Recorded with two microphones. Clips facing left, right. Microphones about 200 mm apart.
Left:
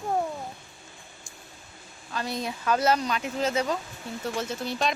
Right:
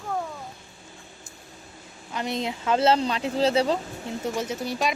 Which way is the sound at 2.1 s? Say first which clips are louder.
Right 3 dB; 20° right (ahead or behind).